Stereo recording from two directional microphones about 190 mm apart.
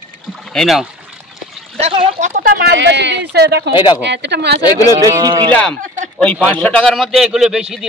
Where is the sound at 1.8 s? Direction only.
30° right (ahead or behind); by 4.6 s 60° right (ahead or behind).